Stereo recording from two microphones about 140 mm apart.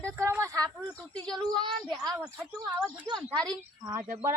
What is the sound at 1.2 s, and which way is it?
Speech, 5° left (ahead or behind).